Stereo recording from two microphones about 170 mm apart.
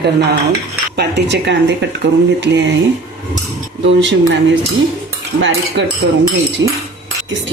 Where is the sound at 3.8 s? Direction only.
90° right.